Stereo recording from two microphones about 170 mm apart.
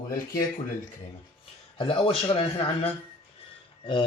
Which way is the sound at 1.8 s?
35° left (ahead or behind).